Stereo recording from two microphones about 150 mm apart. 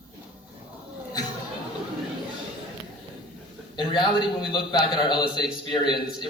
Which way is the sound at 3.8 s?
30° left (ahead or behind).